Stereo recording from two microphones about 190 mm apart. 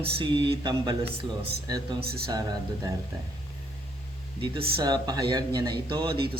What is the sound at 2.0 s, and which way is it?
Speech, 55° right (ahead or behind).